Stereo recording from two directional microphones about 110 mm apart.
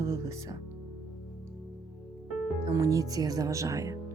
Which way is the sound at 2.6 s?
30° right (ahead or behind).